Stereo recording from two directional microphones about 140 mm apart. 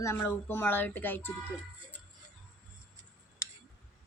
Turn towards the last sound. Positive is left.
turn(degrees=20)  # may be behind; listen again after turning